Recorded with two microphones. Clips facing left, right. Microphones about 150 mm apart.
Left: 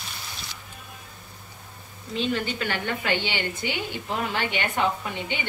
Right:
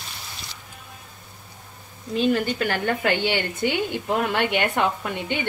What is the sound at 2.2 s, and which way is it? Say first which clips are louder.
A woman's voice: right 5 dB; 45° right (ahead or behind).